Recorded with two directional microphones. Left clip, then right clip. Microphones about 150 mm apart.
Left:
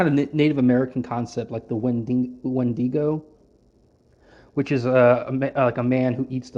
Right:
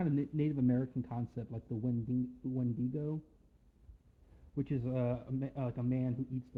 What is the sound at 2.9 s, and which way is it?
Speech, centre (ahead or behind).